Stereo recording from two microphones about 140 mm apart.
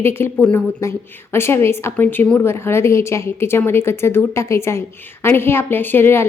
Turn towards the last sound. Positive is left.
turn(degrees=15)  # may be behind; listen again after turning